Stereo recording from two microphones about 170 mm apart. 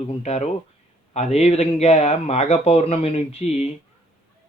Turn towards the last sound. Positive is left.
turn(degrees=40)  # may be behind; listen again after turning